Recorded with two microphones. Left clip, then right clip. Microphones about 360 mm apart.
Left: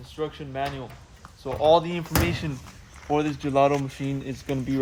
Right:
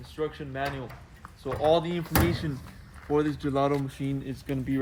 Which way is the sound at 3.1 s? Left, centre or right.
Centre.